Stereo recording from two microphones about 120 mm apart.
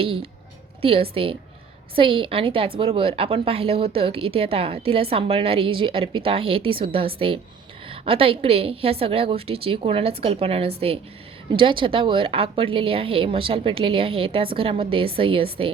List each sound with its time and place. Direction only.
0.0 s a woman's voice: 50° right (ahead or behind)